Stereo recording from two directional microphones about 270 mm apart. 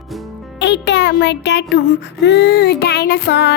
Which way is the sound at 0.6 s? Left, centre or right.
Left.